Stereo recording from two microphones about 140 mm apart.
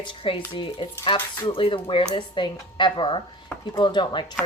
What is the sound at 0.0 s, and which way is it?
A woman's voice, 40° left (ahead or behind).